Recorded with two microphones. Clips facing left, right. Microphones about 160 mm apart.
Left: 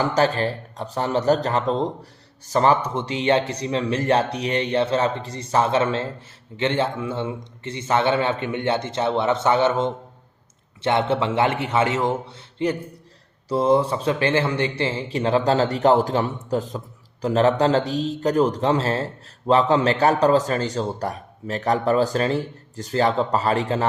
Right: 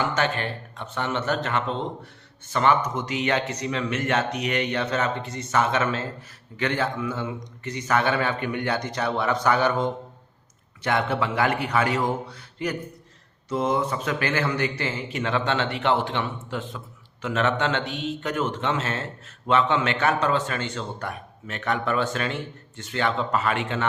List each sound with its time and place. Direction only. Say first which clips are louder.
0.0 s speech: left 5 dB; 35° left (ahead or behind)